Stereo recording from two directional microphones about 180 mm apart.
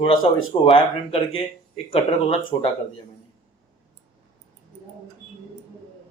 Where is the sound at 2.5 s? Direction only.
25° left (ahead or behind).